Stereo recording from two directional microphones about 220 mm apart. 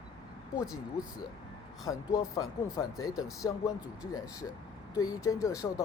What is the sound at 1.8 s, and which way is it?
Speech, 15° left (ahead or behind).